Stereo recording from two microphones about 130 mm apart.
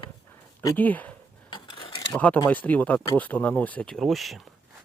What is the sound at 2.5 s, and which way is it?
Speech, 15° left (ahead or behind).